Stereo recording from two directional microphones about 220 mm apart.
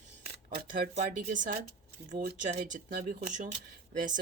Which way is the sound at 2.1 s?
35° right (ahead or behind).